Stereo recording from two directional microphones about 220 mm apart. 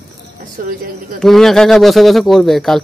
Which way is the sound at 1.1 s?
Centre (ahead or behind).